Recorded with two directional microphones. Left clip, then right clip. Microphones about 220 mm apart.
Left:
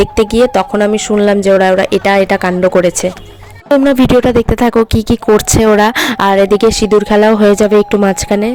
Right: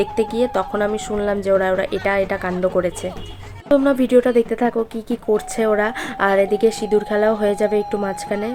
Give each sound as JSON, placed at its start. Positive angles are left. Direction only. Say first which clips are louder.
{"t": 0.0, "sound": "speech", "louder": "left 10 dB", "side_deg": 40}